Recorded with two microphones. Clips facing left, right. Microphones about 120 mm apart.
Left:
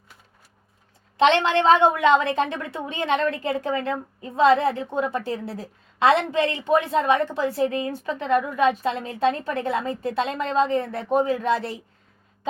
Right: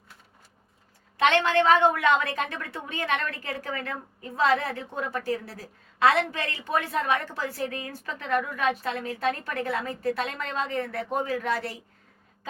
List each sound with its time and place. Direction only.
1.1 s a woman's voice: 25° left (ahead or behind)